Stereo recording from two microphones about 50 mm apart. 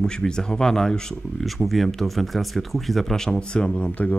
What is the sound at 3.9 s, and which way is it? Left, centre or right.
Speech, left.